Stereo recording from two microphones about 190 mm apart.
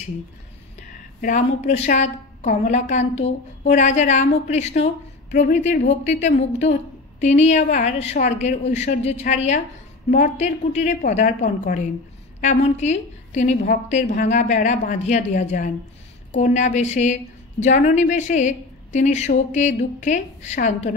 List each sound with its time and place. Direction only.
0.7 s a woman's voice: 40° left (ahead or behind)
7.2 s a woman's voice: 35° left (ahead or behind)